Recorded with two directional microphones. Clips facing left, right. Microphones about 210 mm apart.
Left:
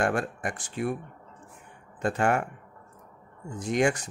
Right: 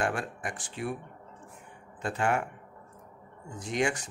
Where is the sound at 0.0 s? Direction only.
45° left (ahead or behind).